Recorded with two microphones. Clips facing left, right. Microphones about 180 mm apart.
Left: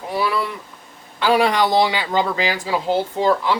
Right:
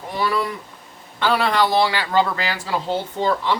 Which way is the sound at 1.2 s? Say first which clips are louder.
Left 2 dB; 15° left (ahead or behind).